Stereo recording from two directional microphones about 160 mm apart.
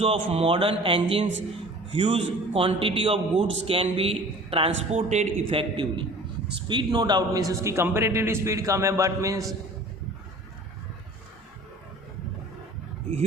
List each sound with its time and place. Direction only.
0.0 s a man's voice: 40° right (ahead or behind); by 9.5 s 20° right (ahead or behind)